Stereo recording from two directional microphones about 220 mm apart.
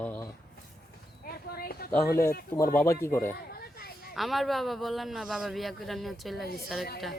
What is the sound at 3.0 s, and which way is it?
Speech, 10° left (ahead or behind).